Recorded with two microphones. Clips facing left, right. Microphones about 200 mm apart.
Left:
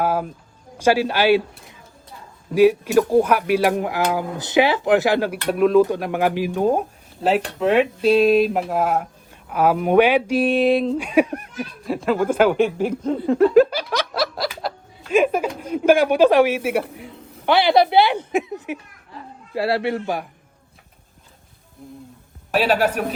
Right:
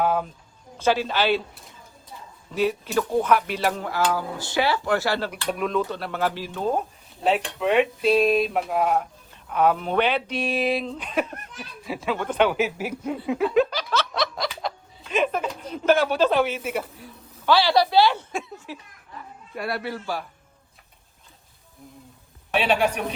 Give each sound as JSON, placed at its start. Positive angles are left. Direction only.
{"t": 0.0, "sound": "speech", "side_deg": 5}
{"t": 2.5, "sound": "speech", "side_deg": 10}
{"t": 5.5, "sound": "speech", "side_deg": 0}
{"t": 5.8, "sound": "speech", "side_deg": 15}
{"t": 7.2, "sound": "speech", "side_deg": 0}
{"t": 11.0, "sound": "speech", "side_deg": 10}
{"t": 11.8, "sound": "speech", "side_deg": 0}
{"t": 16.7, "sound": "a man's voice", "side_deg": 70}
{"t": 17.4, "sound": "speech", "side_deg": 20}
{"t": 19.5, "sound": "a man's voice", "side_deg": 30}
{"t": 22.5, "sound": "speech", "side_deg": 5}